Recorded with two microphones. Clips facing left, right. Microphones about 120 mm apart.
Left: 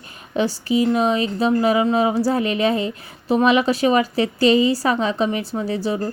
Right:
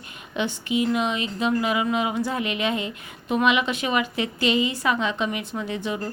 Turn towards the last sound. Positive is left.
turn(degrees=35)  # may be behind; listen again after turning